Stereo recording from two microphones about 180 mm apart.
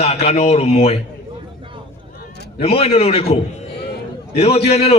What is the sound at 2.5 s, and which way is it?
A man's voice, 35° left (ahead or behind).